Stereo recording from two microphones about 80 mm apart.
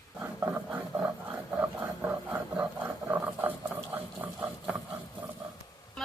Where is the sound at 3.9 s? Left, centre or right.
Right.